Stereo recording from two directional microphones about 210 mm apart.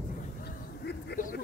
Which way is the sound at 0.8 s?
50° left (ahead or behind).